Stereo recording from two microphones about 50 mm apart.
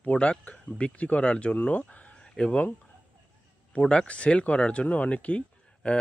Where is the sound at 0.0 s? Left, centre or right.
Left.